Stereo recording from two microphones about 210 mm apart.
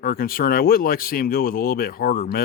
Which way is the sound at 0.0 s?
45° left (ahead or behind).